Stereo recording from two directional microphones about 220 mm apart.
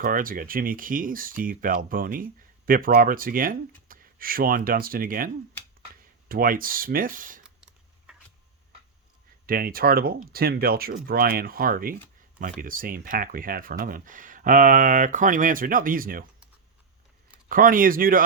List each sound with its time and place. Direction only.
0.0 s speech: 40° right (ahead or behind)
7.4 s a sound: 5° right (ahead or behind)
9.5 s speech: 40° right (ahead or behind)
17.5 s speech: 40° right (ahead or behind)